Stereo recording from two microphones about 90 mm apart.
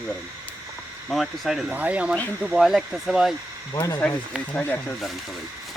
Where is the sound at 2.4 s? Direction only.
Centre (ahead or behind).